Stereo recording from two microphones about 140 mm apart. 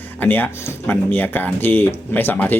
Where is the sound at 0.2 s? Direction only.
15° left (ahead or behind).